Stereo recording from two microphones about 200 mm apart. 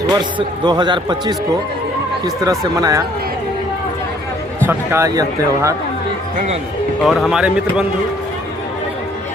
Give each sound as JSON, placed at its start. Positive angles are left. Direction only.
{"t": 0.1, "sound": "a man's voice", "side_deg": -20}
{"t": 4.6, "sound": "speech", "side_deg": -10}
{"t": 7.0, "sound": "speech", "side_deg": 0}